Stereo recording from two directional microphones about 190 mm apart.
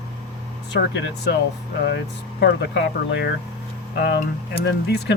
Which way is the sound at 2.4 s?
65° left (ahead or behind).